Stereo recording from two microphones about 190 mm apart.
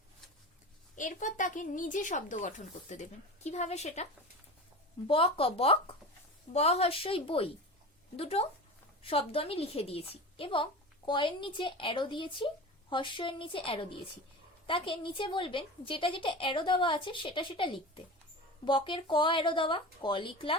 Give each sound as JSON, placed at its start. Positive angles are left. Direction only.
{"t": 0.9, "sound": "a woman's voice", "side_deg": 40}